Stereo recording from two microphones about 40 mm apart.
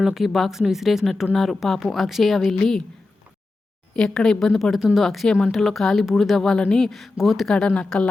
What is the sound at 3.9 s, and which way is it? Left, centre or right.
Speech, centre.